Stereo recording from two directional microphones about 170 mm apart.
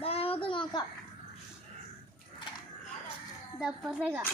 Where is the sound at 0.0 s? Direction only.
35° left (ahead or behind).